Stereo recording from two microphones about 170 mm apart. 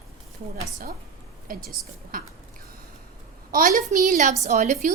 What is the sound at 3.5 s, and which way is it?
A woman's voice, 55° right (ahead or behind).